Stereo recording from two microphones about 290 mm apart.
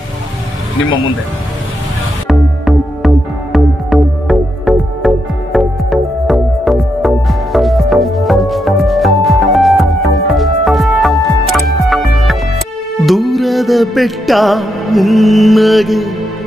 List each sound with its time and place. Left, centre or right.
0.7 s speech: left
2.2 s music: centre